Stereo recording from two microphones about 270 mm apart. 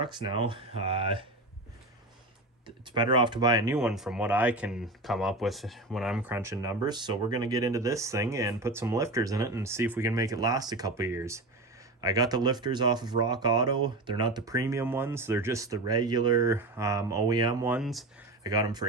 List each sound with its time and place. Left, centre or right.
0.0 s speech: centre
2.6 s speech: centre
18.4 s speech: centre